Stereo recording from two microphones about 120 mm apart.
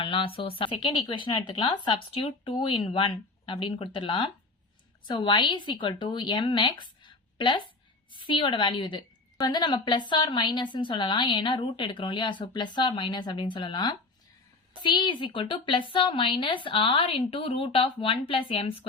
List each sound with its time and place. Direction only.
0.0 s a woman's voice: 45° left (ahead or behind)
7.0 s a sound: 40° left (ahead or behind)
8.2 s a woman's voice: 45° left (ahead or behind)